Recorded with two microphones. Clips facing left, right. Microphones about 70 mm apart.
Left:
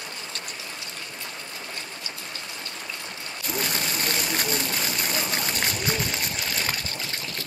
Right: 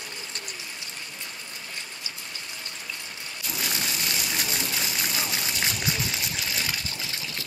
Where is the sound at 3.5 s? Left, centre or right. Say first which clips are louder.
Left 3 dB; left.